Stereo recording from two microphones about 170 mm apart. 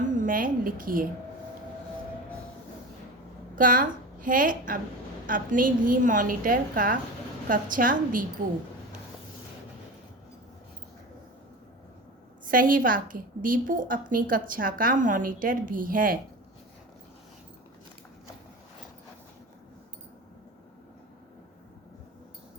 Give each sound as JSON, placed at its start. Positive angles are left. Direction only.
{"t": 0.0, "sound": "a woman's voice", "side_deg": -50}
{"t": 3.5, "sound": "a woman's voice", "side_deg": -55}
{"t": 12.5, "sound": "a woman's voice", "side_deg": -55}